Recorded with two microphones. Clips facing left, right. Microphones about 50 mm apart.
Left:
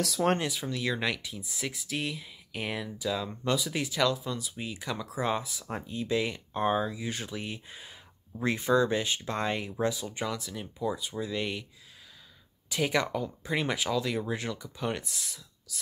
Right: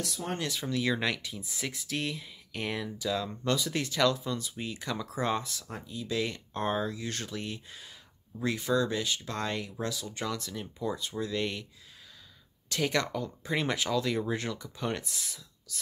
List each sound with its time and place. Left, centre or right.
0.0 s speech: left
0.5 s speech: centre
5.7 s speech: left
6.1 s speech: centre
8.4 s speech: left
10.2 s speech: centre
12.6 s speech: centre